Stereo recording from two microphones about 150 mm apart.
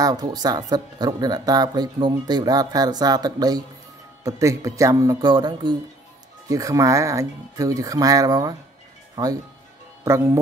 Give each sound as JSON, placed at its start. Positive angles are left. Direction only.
{"t": 0.0, "sound": "speech", "side_deg": -25}